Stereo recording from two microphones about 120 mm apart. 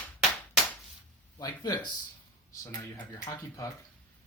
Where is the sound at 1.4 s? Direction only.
35° left (ahead or behind).